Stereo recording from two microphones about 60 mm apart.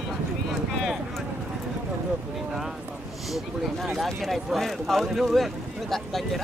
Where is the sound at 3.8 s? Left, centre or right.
Centre.